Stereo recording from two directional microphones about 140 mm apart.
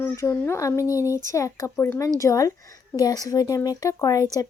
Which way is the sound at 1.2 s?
25° left (ahead or behind).